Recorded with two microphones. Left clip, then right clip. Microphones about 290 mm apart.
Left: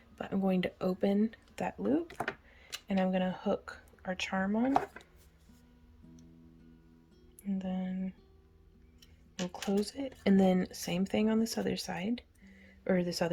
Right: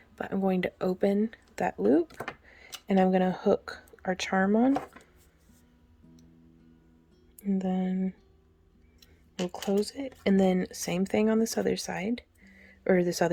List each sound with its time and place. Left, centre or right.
0.2 s speech: centre
7.4 s music: right
9.7 s speech: centre